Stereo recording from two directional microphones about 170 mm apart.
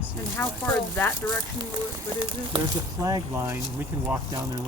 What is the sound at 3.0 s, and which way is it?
Speech, 20° right (ahead or behind).